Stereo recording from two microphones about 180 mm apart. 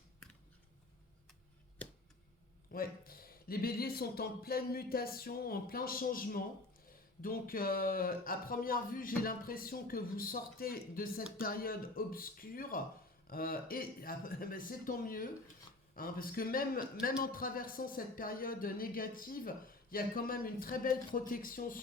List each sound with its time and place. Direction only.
2.7 s a man's voice: 55° left (ahead or behind)